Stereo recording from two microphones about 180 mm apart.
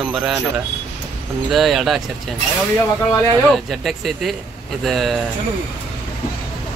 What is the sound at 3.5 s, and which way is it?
Speech, centre (ahead or behind).